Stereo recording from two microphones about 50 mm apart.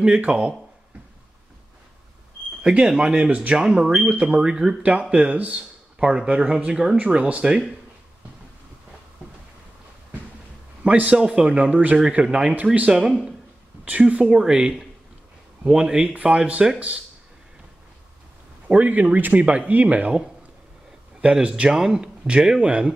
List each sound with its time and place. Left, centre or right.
0.3 s speech: centre
2.8 s a man's voice: centre
10.8 s a man's voice: right
11.1 s a man's voice: centre
18.7 s a man's voice: right